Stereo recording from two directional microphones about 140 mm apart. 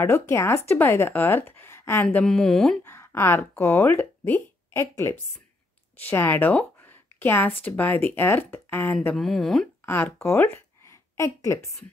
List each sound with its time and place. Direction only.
0.0 s speech: 15° left (ahead or behind)
2.0 s speech: 5° left (ahead or behind)
2.8 s speech: 15° left (ahead or behind)
9.1 s speech: centre (ahead or behind)
9.8 s a woman's voice: 20° left (ahead or behind)